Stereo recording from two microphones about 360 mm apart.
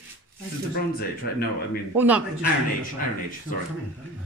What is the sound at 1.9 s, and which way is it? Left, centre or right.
Speech, centre.